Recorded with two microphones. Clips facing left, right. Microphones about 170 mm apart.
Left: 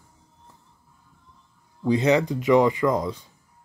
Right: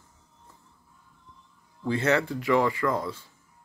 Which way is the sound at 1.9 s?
15° left (ahead or behind).